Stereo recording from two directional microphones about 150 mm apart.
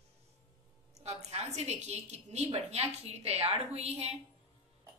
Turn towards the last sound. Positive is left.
turn(degrees=-45)  # may be behind; listen again after turning